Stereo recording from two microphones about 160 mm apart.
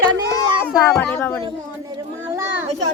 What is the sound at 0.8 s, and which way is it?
Speech, 20° left (ahead or behind).